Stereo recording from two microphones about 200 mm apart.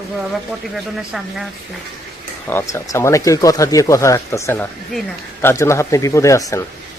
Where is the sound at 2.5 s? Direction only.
15° left (ahead or behind).